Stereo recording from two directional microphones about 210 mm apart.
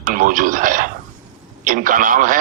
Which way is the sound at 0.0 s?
40° right (ahead or behind).